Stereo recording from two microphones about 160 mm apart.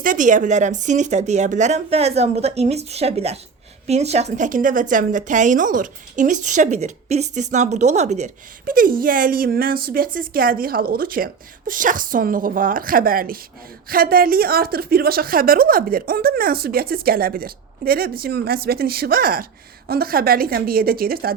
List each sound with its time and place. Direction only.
0.0 s a woman's voice: 55° right (ahead or behind)